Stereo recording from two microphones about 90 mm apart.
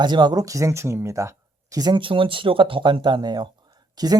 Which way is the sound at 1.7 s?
50° right (ahead or behind).